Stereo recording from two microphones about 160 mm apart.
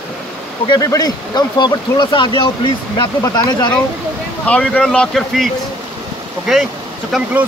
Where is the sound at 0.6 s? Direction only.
25° left (ahead or behind).